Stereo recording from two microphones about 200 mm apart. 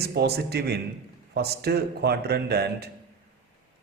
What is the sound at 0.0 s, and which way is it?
Speech, 55° right (ahead or behind).